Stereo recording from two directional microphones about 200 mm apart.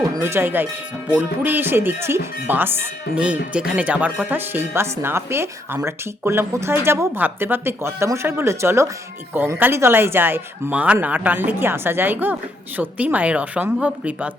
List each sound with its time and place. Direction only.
0.3 s speech: 10° right (ahead or behind)